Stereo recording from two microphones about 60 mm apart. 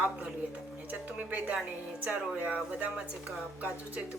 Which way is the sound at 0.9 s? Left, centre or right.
Right.